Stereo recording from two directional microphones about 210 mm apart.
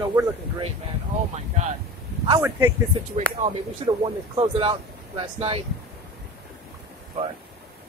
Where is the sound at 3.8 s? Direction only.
30° right (ahead or behind).